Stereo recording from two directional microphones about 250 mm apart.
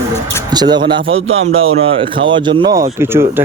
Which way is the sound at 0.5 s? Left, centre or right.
Centre.